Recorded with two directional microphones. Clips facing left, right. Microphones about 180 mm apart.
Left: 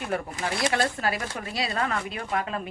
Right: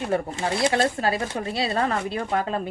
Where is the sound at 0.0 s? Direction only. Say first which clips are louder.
Right 5 dB; 30° right (ahead or behind).